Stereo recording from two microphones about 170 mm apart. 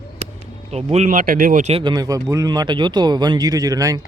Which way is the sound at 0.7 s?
40° right (ahead or behind).